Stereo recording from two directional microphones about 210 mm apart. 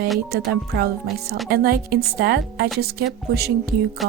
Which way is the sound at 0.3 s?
50° right (ahead or behind).